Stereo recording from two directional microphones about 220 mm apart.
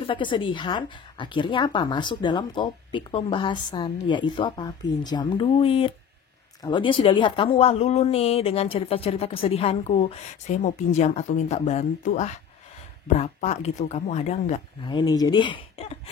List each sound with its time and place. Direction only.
0.0 s speech: 20° left (ahead or behind)